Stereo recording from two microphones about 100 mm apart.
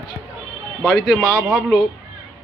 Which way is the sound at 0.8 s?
5° right (ahead or behind).